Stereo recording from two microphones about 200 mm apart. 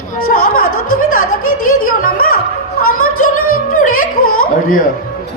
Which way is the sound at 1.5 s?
45° left (ahead or behind).